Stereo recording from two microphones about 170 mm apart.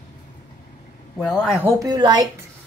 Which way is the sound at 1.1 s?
10° left (ahead or behind).